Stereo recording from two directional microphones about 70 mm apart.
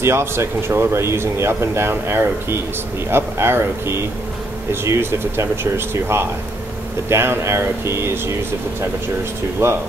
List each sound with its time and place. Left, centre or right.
0.0 s speech: right
9.6 s speech: right